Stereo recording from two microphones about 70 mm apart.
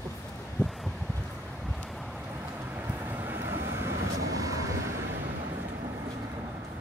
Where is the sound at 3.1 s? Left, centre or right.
Right.